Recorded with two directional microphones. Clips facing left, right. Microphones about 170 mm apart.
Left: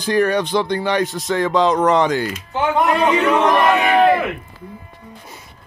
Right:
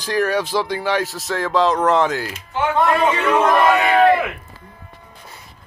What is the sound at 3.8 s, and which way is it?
Crowd, 15° left (ahead or behind).